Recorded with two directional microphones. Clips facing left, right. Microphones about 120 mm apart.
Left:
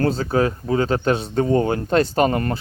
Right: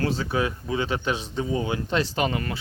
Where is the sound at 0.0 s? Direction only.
40° left (ahead or behind).